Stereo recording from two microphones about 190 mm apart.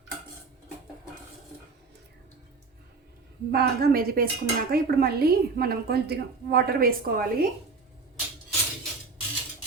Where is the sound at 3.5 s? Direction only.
55° right (ahead or behind).